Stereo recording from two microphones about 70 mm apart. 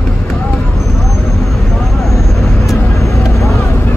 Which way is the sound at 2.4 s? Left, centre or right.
Left.